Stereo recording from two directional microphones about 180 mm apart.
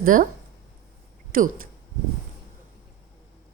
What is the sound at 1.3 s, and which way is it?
Speech, 50° right (ahead or behind).